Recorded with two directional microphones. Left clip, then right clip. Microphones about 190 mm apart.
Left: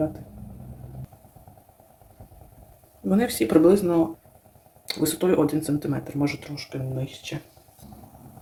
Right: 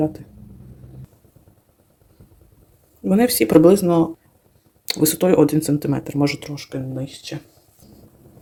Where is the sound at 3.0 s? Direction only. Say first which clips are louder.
Right 6 dB; 40° right (ahead or behind).